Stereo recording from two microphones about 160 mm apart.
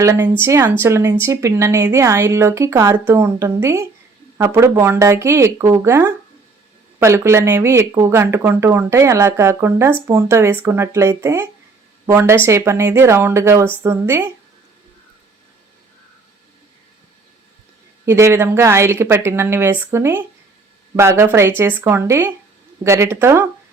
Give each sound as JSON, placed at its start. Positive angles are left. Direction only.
{"t": 0.0, "sound": "speech", "side_deg": -15}
{"t": 18.0, "sound": "speech", "side_deg": -15}